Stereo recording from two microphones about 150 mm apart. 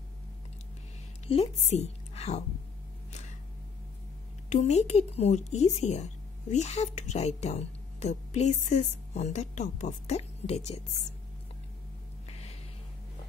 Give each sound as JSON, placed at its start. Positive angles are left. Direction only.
{"t": 1.2, "sound": "a woman's voice", "side_deg": 45}
{"t": 4.5, "sound": "speech", "side_deg": 50}
{"t": 12.3, "sound": "a sound", "side_deg": 45}